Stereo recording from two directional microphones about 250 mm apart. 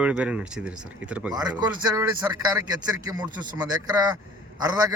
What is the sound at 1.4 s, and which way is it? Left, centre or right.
A man's voice, centre.